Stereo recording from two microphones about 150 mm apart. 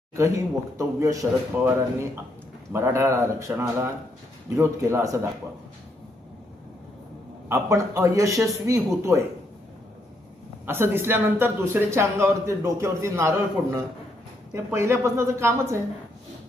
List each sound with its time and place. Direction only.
0.2 s speech: 20° right (ahead or behind)
7.4 s speech: 15° right (ahead or behind)
10.7 s speech: 15° right (ahead or behind)